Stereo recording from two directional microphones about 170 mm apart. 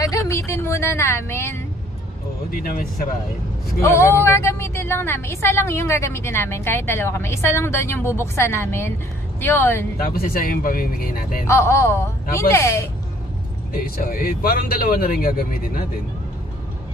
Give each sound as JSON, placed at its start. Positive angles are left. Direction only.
{"t": 0.0, "sound": "a woman's voice", "side_deg": 20}
{"t": 2.5, "sound": "speech", "side_deg": 55}
{"t": 3.8, "sound": "a woman's voice", "side_deg": 15}
{"t": 10.1, "sound": "speech", "side_deg": 60}
{"t": 11.4, "sound": "a woman's voice", "side_deg": 15}
{"t": 13.7, "sound": "speech", "side_deg": 60}